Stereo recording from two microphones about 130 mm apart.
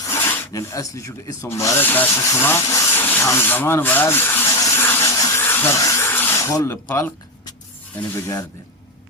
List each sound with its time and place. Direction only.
0.1 s rub: 20° left (ahead or behind)
6.8 s speech: 15° left (ahead or behind)